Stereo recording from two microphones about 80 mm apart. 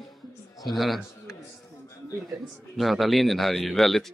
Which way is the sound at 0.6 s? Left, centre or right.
Centre.